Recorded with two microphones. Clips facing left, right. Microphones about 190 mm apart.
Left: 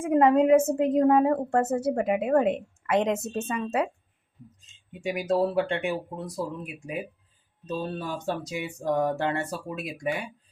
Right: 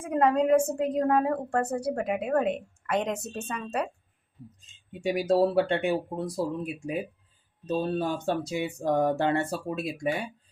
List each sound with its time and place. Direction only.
0.0 s a woman's voice: 20° left (ahead or behind)
4.9 s speech: 35° right (ahead or behind)